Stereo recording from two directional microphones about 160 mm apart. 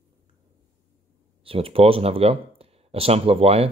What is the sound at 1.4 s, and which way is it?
Speech, 35° right (ahead or behind).